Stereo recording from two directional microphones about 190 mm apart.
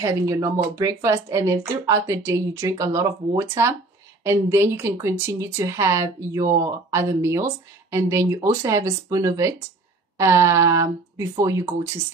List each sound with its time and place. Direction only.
0.0 s speech: 15° right (ahead or behind)